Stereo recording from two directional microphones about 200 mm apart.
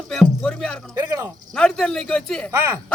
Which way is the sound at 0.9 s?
15° right (ahead or behind).